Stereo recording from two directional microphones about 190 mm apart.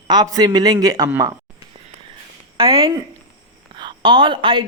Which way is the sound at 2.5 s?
30° right (ahead or behind).